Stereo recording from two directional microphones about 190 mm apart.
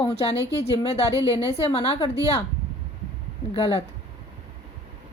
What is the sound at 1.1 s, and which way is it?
Speech, 15° right (ahead or behind).